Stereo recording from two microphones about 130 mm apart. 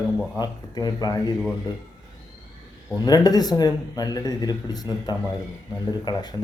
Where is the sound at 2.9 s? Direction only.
30° left (ahead or behind).